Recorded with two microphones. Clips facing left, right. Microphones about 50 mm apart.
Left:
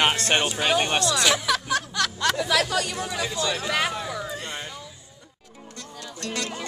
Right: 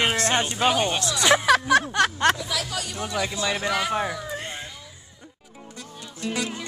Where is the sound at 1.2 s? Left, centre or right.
Right.